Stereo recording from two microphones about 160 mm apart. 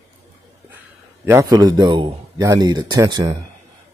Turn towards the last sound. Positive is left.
turn(degrees=-25)  # may be behind; listen again after turning